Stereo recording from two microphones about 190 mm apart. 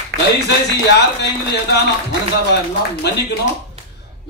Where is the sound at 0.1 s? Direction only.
65° right (ahead or behind).